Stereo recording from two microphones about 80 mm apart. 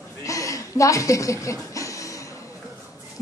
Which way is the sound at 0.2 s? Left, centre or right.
Left.